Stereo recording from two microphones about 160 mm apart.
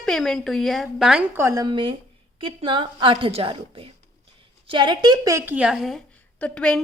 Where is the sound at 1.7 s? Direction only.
30° right (ahead or behind).